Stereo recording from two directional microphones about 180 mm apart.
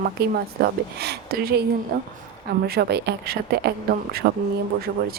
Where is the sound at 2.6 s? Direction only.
60° right (ahead or behind).